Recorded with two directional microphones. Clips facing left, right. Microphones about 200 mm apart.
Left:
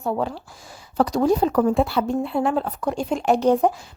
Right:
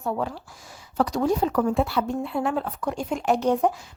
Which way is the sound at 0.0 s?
30° left (ahead or behind).